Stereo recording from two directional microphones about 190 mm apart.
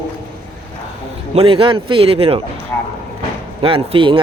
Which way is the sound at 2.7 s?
10° left (ahead or behind).